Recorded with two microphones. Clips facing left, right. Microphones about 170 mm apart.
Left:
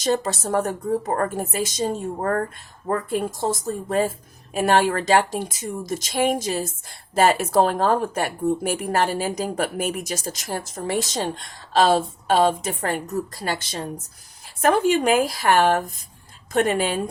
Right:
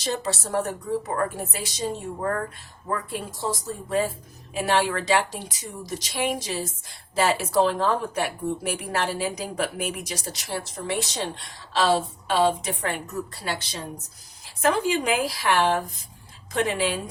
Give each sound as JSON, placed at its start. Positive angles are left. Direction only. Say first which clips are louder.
{"t": 0.0, "sound": "a woman's voice", "louder": "left 6 dB", "side_deg": 45}